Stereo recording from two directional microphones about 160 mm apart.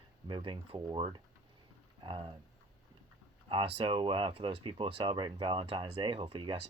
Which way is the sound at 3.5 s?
35° right (ahead or behind).